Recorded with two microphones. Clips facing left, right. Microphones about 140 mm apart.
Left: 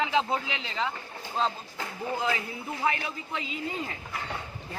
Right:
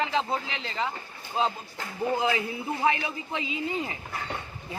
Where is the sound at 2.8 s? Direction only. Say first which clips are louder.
Right 3 dB; 25° right (ahead or behind).